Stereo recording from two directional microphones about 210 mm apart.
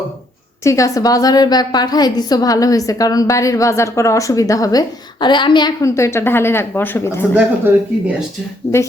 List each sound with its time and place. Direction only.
0.6 s a woman's voice: 15° left (ahead or behind)
7.3 s speech: 5° right (ahead or behind)